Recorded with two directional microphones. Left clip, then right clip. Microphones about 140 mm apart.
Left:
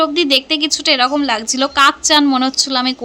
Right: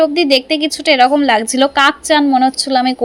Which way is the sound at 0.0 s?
15° right (ahead or behind).